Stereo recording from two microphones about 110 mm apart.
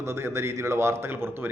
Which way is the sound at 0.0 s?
25° right (ahead or behind).